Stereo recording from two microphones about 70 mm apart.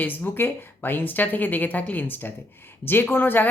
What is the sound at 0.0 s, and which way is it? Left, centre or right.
Speech, left.